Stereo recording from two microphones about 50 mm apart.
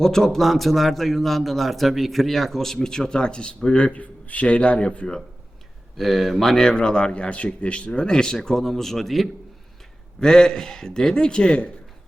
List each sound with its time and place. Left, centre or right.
0.0 s a man's voice: centre
6.0 s speech: centre
6.6 s speech: centre
10.2 s a man's voice: centre